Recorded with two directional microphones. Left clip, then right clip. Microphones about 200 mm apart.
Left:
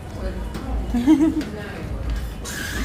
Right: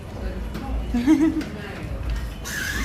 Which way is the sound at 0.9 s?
15° left (ahead or behind).